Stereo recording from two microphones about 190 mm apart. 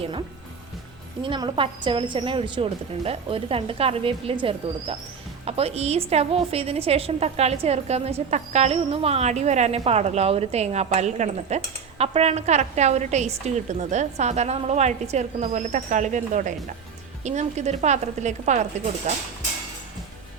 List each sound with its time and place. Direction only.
1.2 s a woman's voice: 25° right (ahead or behind)